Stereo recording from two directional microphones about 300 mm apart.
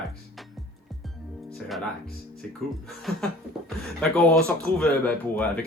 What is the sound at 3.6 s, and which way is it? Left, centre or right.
Speech, centre.